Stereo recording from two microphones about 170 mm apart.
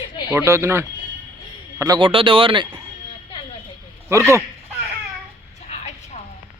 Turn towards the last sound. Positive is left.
turn(degrees=40)  # may be behind; listen again after turning